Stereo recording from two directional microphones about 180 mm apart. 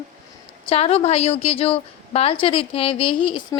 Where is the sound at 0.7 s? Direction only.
35° left (ahead or behind).